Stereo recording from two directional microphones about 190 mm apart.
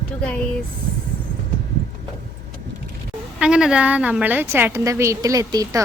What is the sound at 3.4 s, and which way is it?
A woman's voice, 5° right (ahead or behind).